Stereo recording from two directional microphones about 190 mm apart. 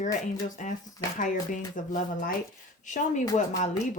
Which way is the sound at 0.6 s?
40° left (ahead or behind).